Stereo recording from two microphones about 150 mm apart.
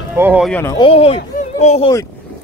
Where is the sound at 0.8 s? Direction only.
40° left (ahead or behind).